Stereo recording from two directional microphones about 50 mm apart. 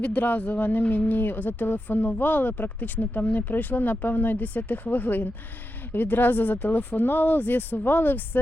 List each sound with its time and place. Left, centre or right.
0.0 s speech: left